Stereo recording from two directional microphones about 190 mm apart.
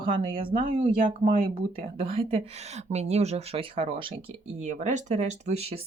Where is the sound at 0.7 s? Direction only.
40° right (ahead or behind).